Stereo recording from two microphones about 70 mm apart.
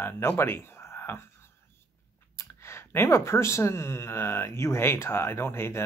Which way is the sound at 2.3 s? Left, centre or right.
Left.